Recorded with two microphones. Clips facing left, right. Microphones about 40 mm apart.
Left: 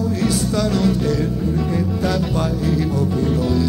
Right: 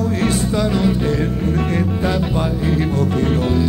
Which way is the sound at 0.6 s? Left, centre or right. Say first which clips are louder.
Even; right.